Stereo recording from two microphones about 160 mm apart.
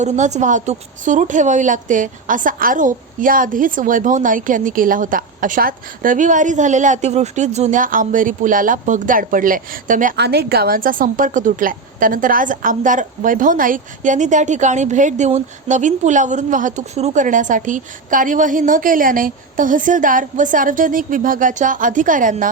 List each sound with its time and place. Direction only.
0.0 s a woman's voice: 45° right (ahead or behind)